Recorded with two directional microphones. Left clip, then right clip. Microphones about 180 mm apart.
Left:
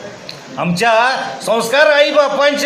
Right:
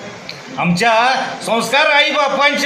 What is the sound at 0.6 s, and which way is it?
A man's voice, 50° left (ahead or behind).